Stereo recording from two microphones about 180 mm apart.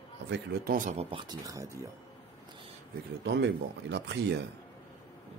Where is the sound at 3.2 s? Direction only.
70° right (ahead or behind).